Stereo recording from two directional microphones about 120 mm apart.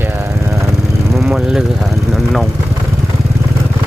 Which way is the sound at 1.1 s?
5° right (ahead or behind).